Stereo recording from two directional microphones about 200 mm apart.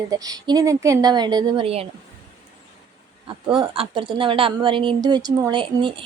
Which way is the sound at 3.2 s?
25° right (ahead or behind).